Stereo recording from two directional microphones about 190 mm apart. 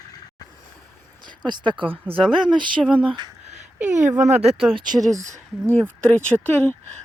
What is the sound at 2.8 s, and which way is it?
Speech, 5° right (ahead or behind).